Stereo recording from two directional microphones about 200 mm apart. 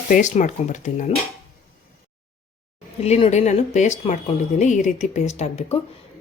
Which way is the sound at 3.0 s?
30° left (ahead or behind).